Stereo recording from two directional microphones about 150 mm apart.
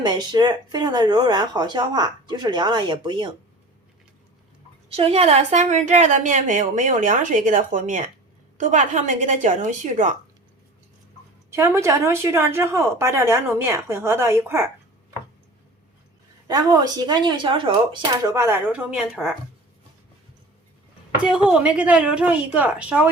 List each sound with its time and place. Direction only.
0.0 s speech: 30° right (ahead or behind)
4.9 s a woman's voice: 40° right (ahead or behind)
11.5 s a woman's voice: 20° right (ahead or behind)
16.5 s speech: 25° right (ahead or behind)
18.3 s a woman's voice: 15° right (ahead or behind)
21.2 s a woman's voice: 5° right (ahead or behind)